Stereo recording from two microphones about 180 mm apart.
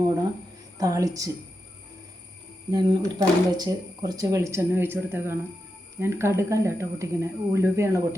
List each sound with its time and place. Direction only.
0.8 s a woman's voice: 20° right (ahead or behind)
2.7 s speech: 20° right (ahead or behind)